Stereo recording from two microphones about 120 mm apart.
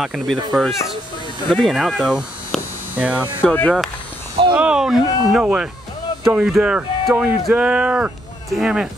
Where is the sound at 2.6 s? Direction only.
15° right (ahead or behind).